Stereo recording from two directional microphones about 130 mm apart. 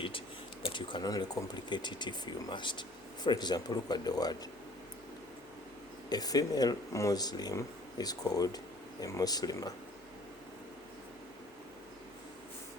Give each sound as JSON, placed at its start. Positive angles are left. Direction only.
{"t": 0.6, "sound": "speech", "side_deg": 40}
{"t": 6.1, "sound": "speech", "side_deg": 30}